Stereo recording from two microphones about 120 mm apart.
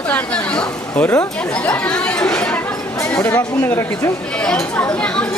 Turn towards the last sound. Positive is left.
turn(degrees=5)  # may be behind; listen again after turning